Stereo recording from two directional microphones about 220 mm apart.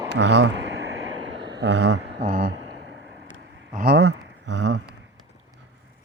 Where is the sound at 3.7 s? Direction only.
45° right (ahead or behind).